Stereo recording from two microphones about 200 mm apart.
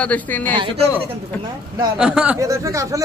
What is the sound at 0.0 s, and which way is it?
Speech, 10° left (ahead or behind).